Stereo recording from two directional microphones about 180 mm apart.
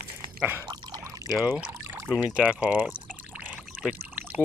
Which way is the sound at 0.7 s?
20° right (ahead or behind).